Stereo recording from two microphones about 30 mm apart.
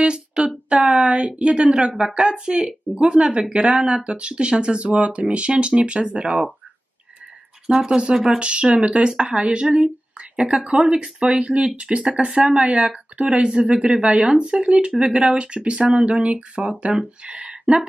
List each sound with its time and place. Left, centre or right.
0.0 s a sound: right
0.7 s speech: right
7.7 s speech: right
8.4 s speech: right
12.3 s speech: right
12.5 s speech: right